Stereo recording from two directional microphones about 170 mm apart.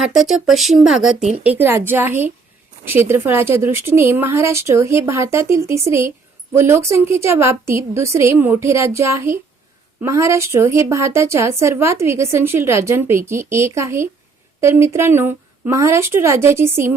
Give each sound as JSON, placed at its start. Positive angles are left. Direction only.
{"t": 0.0, "sound": "speech", "side_deg": 0}
{"t": 1.5, "sound": "a woman's voice", "side_deg": -10}